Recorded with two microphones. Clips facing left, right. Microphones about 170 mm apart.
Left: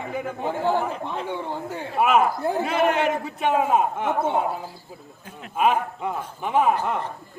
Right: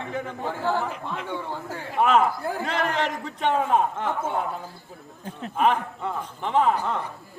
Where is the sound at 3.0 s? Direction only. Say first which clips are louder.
Left 4 dB; 10° left (ahead or behind).